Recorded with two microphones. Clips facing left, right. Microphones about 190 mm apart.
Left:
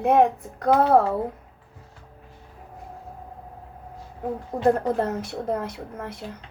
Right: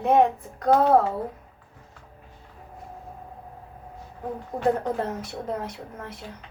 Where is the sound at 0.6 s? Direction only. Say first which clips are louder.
Left 1 dB; 70° left (ahead or behind).